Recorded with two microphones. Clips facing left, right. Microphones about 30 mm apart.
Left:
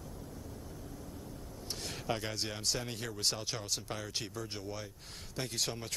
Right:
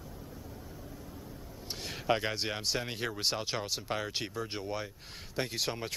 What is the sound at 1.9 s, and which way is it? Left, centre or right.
Speech, right.